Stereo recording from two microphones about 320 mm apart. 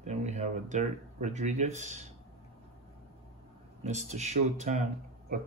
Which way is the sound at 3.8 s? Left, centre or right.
Right.